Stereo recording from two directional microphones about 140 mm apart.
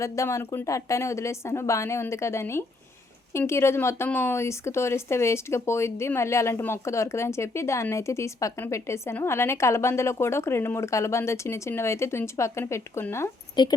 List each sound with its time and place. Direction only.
0.0 s speech: 20° left (ahead or behind)
13.6 s speech: 30° left (ahead or behind)